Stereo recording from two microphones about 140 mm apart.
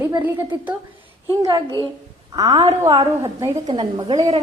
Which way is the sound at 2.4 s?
30° right (ahead or behind).